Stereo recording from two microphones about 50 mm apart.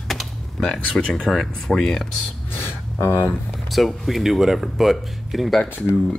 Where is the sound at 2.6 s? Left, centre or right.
Left.